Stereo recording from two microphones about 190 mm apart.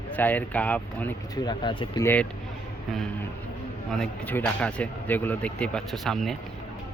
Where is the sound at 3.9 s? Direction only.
5° left (ahead or behind).